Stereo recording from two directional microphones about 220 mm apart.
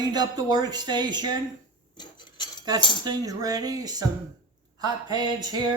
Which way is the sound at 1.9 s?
20° left (ahead or behind).